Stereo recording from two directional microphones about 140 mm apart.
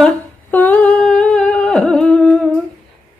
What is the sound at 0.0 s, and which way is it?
Humming, 10° left (ahead or behind).